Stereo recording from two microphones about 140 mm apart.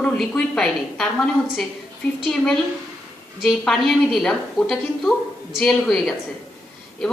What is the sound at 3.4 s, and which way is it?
A woman's voice, centre (ahead or behind).